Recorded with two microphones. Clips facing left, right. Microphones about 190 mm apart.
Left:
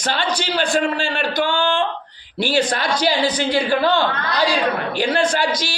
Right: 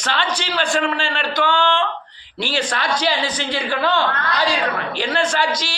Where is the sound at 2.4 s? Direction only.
40° left (ahead or behind).